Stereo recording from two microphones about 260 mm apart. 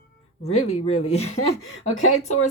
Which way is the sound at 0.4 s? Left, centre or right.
Left.